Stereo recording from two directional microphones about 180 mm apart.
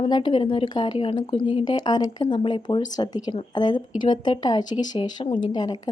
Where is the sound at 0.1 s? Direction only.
25° left (ahead or behind).